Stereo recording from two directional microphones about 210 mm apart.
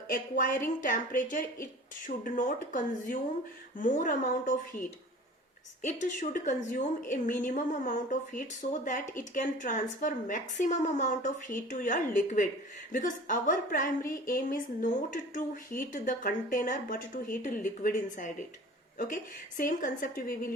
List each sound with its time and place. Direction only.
0.1 s a woman's voice: 40° left (ahead or behind)